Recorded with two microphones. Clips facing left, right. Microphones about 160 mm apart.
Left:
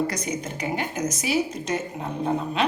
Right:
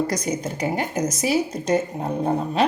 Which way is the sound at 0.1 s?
40° right (ahead or behind).